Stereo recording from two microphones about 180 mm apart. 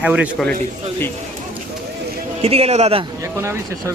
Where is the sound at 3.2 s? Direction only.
15° right (ahead or behind).